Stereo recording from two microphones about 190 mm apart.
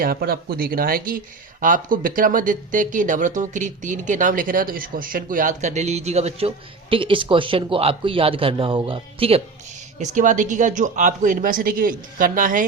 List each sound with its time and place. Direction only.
0.0 s a man's voice: 50° right (ahead or behind); by 9.4 s 30° right (ahead or behind)
10.0 s speech: 40° right (ahead or behind)